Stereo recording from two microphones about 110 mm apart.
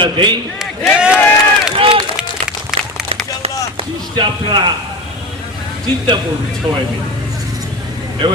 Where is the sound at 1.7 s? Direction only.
50° right (ahead or behind).